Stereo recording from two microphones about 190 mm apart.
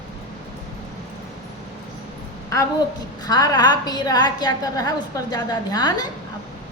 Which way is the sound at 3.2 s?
20° left (ahead or behind).